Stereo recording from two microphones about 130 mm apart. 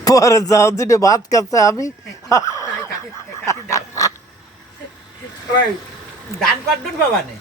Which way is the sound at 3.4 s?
25° left (ahead or behind).